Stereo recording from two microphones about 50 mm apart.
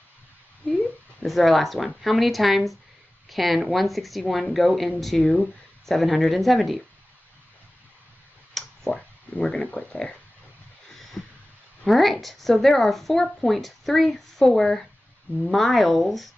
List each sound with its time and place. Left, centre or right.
0.7 s a sound: centre
1.2 s a woman's voice: centre
8.6 s clicking: centre
8.9 s speech: left
11.0 s a sound: centre
11.8 s a woman's voice: centre